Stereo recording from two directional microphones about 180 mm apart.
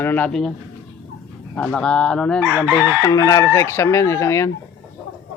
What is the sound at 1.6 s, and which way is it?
Speech, 5° left (ahead or behind).